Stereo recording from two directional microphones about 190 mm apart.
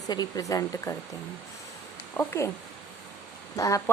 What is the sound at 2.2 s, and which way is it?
Speech, 15° left (ahead or behind).